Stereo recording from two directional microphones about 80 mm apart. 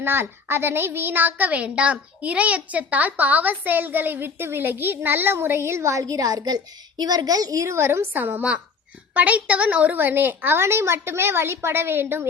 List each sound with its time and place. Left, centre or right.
0.0 s a woman's voice: right